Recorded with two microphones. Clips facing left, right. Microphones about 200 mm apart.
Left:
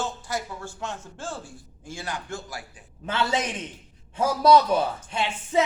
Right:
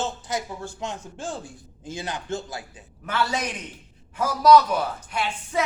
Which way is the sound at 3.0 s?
25° left (ahead or behind).